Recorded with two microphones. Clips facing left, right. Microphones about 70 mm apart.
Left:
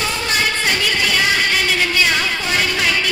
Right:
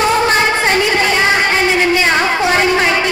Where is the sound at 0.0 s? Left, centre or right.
Right.